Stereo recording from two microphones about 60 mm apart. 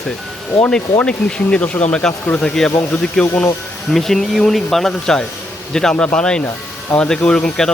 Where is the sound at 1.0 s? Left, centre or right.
Centre.